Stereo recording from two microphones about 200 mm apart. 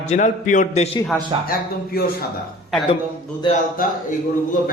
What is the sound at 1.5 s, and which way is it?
Speech, 50° left (ahead or behind).